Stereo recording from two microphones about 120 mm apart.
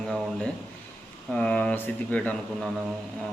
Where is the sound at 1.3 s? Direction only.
10° left (ahead or behind).